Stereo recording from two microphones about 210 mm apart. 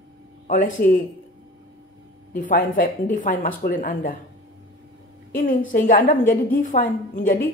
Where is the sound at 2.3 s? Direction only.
40° left (ahead or behind).